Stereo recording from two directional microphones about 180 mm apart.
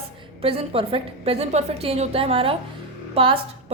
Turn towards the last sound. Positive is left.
turn(degrees=-30)  # may be behind; listen again after turning